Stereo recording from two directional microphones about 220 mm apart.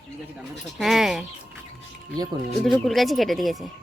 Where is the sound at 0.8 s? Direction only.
Centre (ahead or behind).